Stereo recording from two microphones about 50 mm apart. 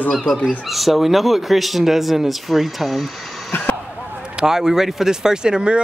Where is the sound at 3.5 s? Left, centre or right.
Left.